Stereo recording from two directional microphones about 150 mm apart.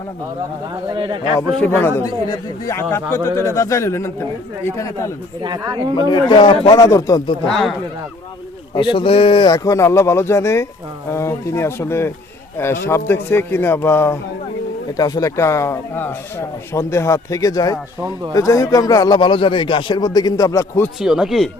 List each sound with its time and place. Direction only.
0.9 s a man's voice: 30° right (ahead or behind)
1.6 s a man's voice: 10° left (ahead or behind)
5.4 s speech: 30° right (ahead or behind)
6.1 s a man's voice: 30° left (ahead or behind)
7.4 s speech: centre (ahead or behind)
8.7 s a man's voice: 35° left (ahead or behind); by 14.2 s 15° left (ahead or behind)
14.9 s a man's voice: 25° left (ahead or behind)
21.0 s speech: 5° right (ahead or behind)